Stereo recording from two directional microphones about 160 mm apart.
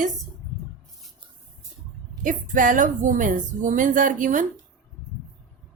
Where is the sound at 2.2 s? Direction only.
55° right (ahead or behind).